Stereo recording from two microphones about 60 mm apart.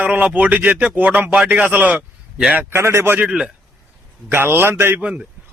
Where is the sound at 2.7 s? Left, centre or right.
Right.